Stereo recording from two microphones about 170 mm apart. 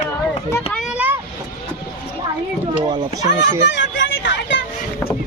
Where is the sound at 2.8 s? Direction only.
25° right (ahead or behind).